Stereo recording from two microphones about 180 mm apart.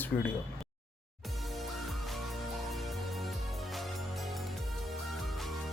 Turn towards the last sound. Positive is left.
turn(degrees=0)  # may be behind; listen again after turning